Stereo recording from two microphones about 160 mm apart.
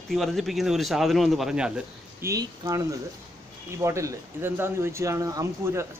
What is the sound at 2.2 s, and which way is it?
A man's voice, 20° right (ahead or behind).